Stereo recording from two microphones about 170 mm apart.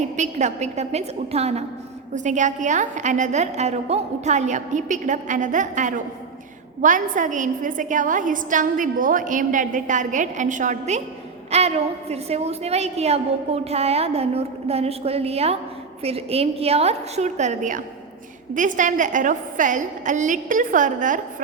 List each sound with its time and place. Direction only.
0.2 s a woman's voice: 45° right (ahead or behind)